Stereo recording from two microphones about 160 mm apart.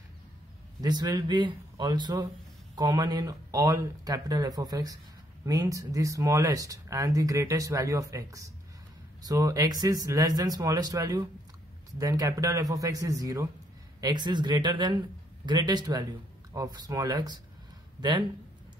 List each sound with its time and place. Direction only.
0.7 s speech: 25° right (ahead or behind)